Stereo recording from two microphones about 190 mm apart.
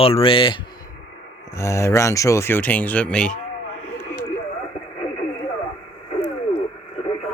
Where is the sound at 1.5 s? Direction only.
15° left (ahead or behind).